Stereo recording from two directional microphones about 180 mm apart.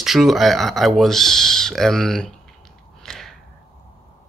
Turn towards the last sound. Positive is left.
turn(degrees=0)  # may be behind; listen again after turning